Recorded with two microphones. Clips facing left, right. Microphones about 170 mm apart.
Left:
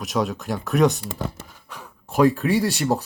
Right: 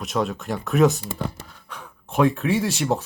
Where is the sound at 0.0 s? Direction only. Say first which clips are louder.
Left 1 dB; centre (ahead or behind).